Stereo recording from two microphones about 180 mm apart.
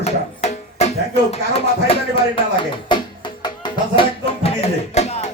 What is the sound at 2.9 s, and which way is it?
Music, 25° left (ahead or behind).